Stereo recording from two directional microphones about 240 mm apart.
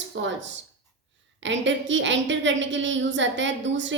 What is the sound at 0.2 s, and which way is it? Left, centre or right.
A woman's voice, right.